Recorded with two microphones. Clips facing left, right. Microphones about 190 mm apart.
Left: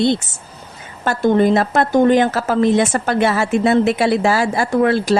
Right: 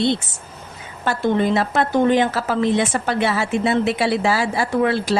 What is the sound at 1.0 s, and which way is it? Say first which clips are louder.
A woman's voice: left 5 dB; 45° left (ahead or behind).